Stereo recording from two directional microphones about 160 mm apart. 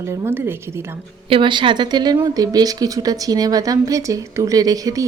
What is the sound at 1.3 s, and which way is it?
A woman's voice, 30° right (ahead or behind).